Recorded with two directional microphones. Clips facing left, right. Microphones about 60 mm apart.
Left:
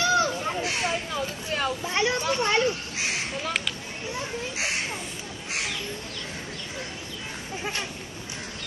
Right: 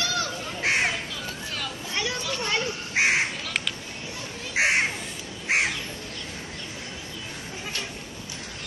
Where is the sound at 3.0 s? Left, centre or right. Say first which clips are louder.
Right 8 dB; right.